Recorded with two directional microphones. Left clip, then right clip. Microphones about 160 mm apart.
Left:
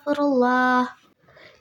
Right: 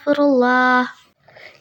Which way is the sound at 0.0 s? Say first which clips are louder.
Right 5 dB; 15° right (ahead or behind).